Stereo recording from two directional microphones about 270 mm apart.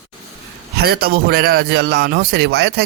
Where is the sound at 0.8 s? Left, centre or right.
Right.